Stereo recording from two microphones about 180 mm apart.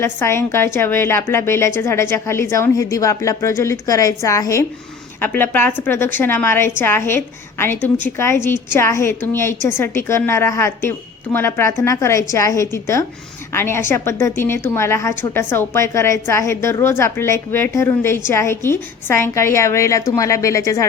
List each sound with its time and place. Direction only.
0.0 s a woman's voice: 15° left (ahead or behind)